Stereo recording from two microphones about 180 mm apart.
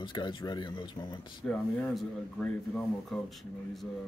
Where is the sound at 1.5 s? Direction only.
5° left (ahead or behind).